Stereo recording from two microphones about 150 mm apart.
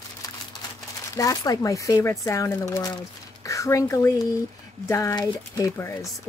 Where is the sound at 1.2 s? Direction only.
25° left (ahead or behind).